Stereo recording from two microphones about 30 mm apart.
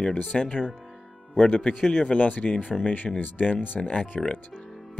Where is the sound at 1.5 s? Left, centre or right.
Left.